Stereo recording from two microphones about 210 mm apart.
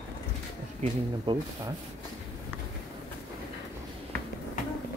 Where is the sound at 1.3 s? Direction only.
25° right (ahead or behind).